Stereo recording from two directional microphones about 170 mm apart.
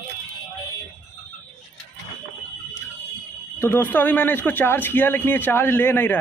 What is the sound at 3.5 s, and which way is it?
A man's voice, 15° left (ahead or behind).